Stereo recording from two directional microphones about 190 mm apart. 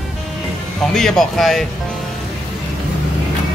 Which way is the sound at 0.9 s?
Centre (ahead or behind).